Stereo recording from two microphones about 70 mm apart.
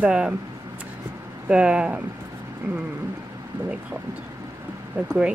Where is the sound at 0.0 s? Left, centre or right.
Centre.